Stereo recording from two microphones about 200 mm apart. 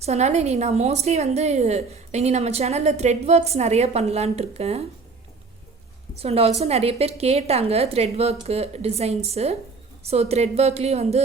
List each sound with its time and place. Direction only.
0.0 s a woman's voice: 35° right (ahead or behind)
6.1 s a woman's voice: 30° right (ahead or behind)